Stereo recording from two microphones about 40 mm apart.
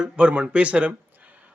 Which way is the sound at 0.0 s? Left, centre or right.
Right.